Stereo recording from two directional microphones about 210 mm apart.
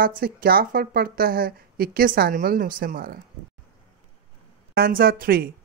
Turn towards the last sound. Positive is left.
turn(degrees=-45)  # may be behind; listen again after turning